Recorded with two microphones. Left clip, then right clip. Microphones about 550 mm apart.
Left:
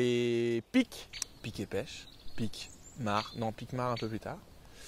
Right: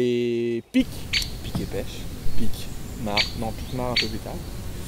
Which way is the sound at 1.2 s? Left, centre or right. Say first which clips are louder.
Right 11 dB; left.